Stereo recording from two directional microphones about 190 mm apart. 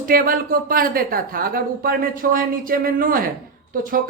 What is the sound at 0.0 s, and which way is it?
Speech, 50° right (ahead or behind).